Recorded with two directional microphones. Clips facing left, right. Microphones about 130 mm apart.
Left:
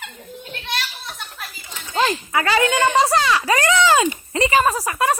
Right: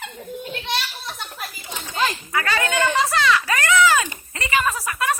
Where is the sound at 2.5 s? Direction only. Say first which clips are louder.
Left 4 dB; 15° left (ahead or behind).